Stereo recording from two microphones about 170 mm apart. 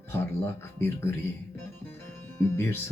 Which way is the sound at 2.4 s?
15° left (ahead or behind).